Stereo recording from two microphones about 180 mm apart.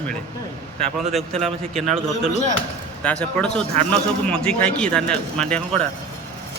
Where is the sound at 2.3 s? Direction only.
40° left (ahead or behind).